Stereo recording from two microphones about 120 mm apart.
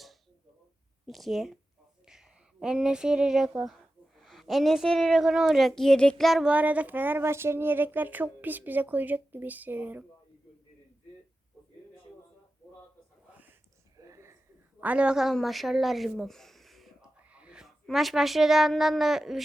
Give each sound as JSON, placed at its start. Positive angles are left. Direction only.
{"t": 1.0, "sound": "a woman's voice", "side_deg": 0}
{"t": 6.5, "sound": "speech", "side_deg": -15}
{"t": 14.0, "sound": "a sound", "side_deg": -25}
{"t": 14.8, "sound": "a woman's voice", "side_deg": -10}